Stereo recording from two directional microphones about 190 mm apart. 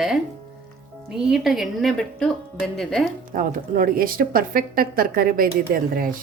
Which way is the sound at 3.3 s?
50° right (ahead or behind).